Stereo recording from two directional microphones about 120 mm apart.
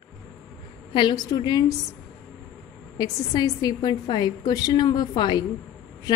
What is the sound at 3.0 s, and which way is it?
A woman's voice, 35° left (ahead or behind).